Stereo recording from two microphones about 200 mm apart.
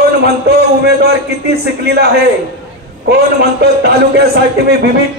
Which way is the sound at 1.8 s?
55° right (ahead or behind).